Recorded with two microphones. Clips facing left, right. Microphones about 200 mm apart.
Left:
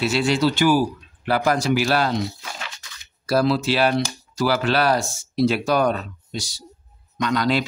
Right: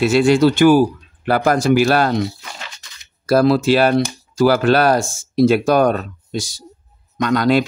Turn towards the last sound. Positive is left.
turn(degrees=-50)  # may be behind; listen again after turning